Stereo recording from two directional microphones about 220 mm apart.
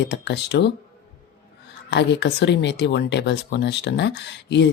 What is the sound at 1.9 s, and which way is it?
Speech, 50° left (ahead or behind).